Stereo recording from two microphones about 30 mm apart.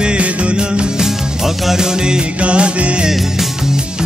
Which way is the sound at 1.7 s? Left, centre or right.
Right.